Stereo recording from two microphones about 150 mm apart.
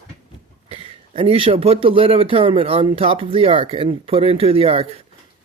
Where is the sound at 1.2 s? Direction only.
40° right (ahead or behind).